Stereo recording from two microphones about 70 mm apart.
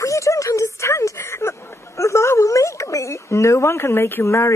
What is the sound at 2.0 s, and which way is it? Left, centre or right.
A woman's voice, left.